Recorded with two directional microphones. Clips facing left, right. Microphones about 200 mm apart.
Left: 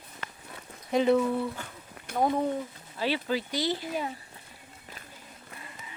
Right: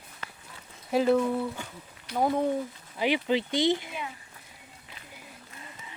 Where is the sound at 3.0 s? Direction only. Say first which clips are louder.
Right 3 dB; 20° right (ahead or behind).